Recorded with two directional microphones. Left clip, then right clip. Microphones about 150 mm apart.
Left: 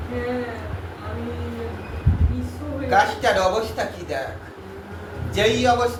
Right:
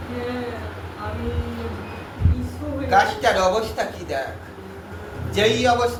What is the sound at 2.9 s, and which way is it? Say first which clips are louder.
A man's voice: right 1 dB; 15° right (ahead or behind).